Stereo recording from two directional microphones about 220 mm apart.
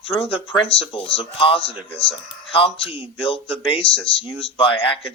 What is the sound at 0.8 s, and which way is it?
Speech, 25° left (ahead or behind).